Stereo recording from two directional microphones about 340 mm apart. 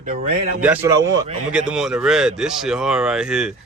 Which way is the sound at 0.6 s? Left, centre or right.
Centre.